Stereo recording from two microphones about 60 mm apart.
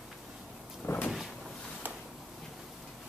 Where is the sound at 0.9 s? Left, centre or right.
Left.